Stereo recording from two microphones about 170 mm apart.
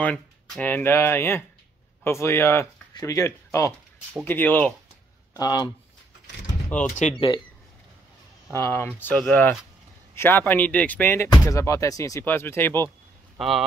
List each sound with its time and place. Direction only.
0.0 s speech: 5° left (ahead or behind)
5.4 s speech: 25° left (ahead or behind)
6.7 s speech: 10° left (ahead or behind)
8.5 s speech: 15° left (ahead or behind)
13.4 s speech: centre (ahead or behind)